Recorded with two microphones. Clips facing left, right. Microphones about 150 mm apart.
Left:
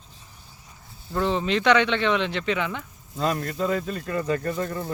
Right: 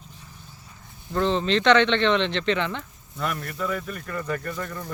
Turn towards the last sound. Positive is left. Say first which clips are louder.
# left 5 dB
turn(degrees=30)  # may be behind; listen again after turning